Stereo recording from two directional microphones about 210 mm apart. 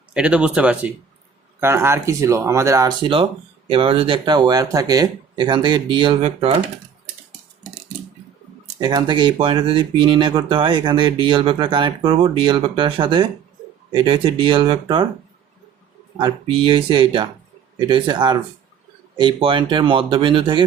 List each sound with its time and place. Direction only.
0.1 s speech: 5° right (ahead or behind); by 6.6 s 30° right (ahead or behind)
8.8 s speech: 20° right (ahead or behind)
16.1 s speech: 25° right (ahead or behind)